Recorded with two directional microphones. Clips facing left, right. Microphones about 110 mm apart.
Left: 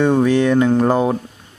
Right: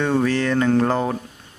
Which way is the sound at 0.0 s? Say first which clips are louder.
Left 5 dB; 15° left (ahead or behind).